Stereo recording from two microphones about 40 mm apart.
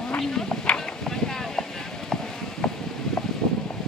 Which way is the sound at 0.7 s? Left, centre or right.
Centre.